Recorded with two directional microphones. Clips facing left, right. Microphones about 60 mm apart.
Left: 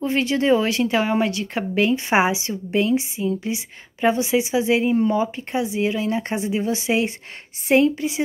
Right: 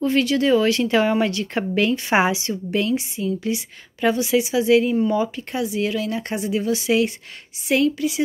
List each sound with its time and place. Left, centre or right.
0.0 s a woman's voice: left